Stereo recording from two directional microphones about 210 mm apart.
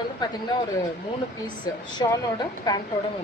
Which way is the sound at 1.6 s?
20° left (ahead or behind).